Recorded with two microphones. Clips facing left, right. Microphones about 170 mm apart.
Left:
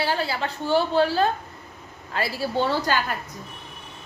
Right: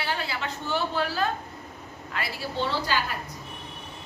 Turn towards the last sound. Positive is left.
turn(degrees=45)  # may be behind; listen again after turning